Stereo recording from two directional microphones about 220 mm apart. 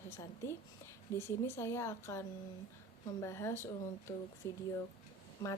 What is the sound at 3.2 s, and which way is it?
Speech, 10° left (ahead or behind).